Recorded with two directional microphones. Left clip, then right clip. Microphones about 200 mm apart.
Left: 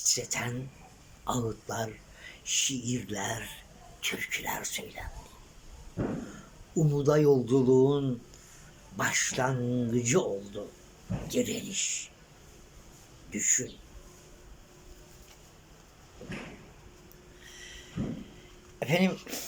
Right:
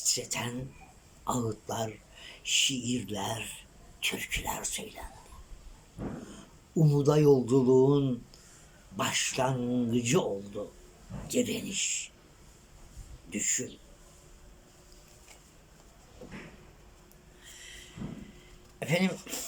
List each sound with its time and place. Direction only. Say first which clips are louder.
0.0 s speech: left 2 dB; 10° right (ahead or behind)
6.0 s a sound: left 7 dB; 50° left (ahead or behind)
6.7 s speech: even; 10° right (ahead or behind)
13.3 s speech: left 3 dB; 10° right (ahead or behind)
17.5 s a sound: left 1 dB; centre (ahead or behind)
18.8 s speech: left 2 dB; centre (ahead or behind)